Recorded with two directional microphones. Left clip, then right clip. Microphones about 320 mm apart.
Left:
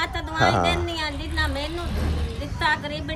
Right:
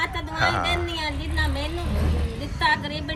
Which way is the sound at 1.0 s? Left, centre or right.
Centre.